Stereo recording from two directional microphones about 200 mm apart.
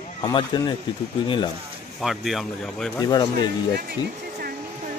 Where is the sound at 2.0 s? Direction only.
Centre (ahead or behind).